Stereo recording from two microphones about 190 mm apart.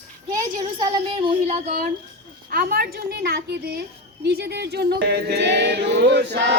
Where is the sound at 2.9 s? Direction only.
55° right (ahead or behind).